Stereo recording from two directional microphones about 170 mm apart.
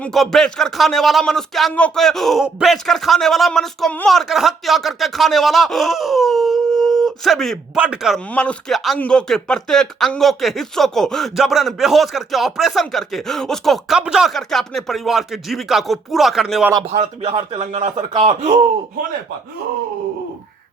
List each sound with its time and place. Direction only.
0.0 s speech: centre (ahead or behind)
8.3 s speech: 5° left (ahead or behind)
16.9 s speech: 35° right (ahead or behind)